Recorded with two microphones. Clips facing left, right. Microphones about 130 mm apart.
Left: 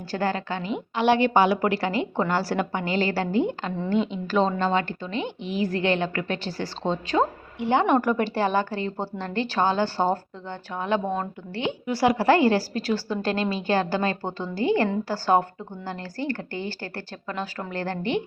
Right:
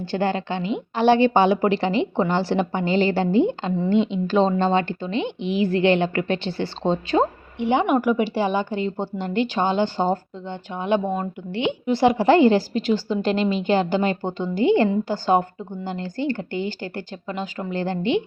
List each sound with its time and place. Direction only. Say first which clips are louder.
0.0 s a woman's voice: right 3 dB; 25° right (ahead or behind)
5.4 s a woman's voice: right 5 dB; 40° left (ahead or behind)
5.6 s a woman's voice: right 5 dB; 30° right (ahead or behind)
7.6 s speech: right 2 dB; 20° right (ahead or behind)
7.9 s a woman's voice: right 2 dB; 5° right (ahead or behind)
11.1 s speech: right 3 dB; 10° right (ahead or behind)
11.6 s a woman's voice: right 4 dB; 25° right (ahead or behind)